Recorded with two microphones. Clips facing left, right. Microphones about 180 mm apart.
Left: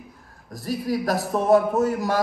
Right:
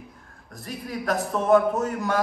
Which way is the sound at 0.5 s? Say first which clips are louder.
Left 8 dB; 35° left (ahead or behind).